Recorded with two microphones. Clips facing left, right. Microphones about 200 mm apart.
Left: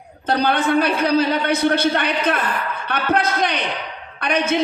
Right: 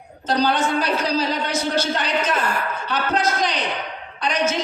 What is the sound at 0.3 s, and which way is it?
A man's voice, 60° left (ahead or behind).